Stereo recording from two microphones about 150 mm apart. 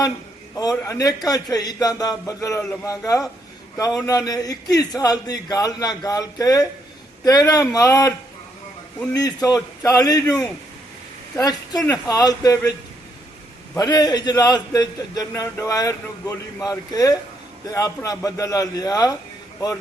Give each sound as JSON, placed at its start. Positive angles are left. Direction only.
{"t": 0.5, "sound": "a man's voice", "side_deg": 20}
{"t": 9.1, "sound": "a man's voice", "side_deg": 25}
{"t": 13.7, "sound": "a man's voice", "side_deg": 25}